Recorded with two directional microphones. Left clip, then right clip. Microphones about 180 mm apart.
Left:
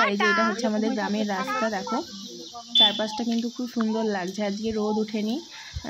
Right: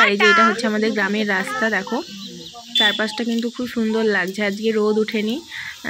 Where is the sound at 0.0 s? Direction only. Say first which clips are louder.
Right 8 dB; 5° right (ahead or behind).